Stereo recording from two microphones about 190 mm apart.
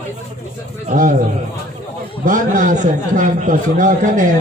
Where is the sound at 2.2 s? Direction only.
40° right (ahead or behind).